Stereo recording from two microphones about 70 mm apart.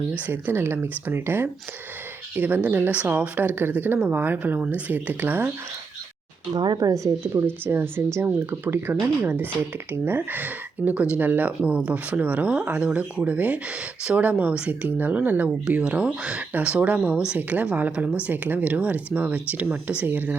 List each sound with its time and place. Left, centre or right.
0.1 s speech: right
6.5 s speech: right
7.4 s speech: right